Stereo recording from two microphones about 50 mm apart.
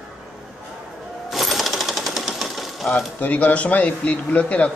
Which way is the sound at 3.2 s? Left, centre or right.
Left.